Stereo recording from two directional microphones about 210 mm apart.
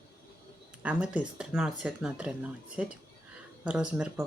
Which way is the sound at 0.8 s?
5° right (ahead or behind).